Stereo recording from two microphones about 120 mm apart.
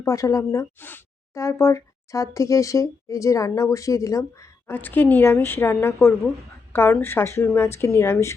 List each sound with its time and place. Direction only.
0.0 s speech: 25° left (ahead or behind)